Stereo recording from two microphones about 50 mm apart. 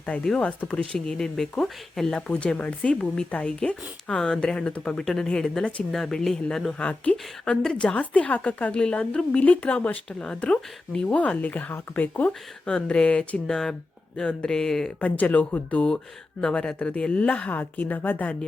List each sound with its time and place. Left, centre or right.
0.0 s a woman's voice: left
0.9 s speech: centre
2.1 s a woman's voice: left
2.9 s a woman's voice: centre
4.9 s speech: centre
6.7 s a woman's voice: left
10.1 s speech: centre
11.2 s speech: left
12.6 s a woman's voice: centre
13.5 s speech: centre
15.0 s a woman's voice: left
16.4 s a woman's voice: centre
17.5 s speech: left